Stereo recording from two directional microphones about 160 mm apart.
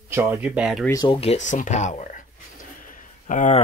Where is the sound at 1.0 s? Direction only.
40° left (ahead or behind).